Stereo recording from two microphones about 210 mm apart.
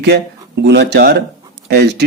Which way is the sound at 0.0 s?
50° right (ahead or behind).